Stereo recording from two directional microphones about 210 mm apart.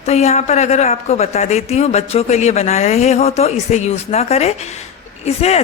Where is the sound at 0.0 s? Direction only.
30° left (ahead or behind).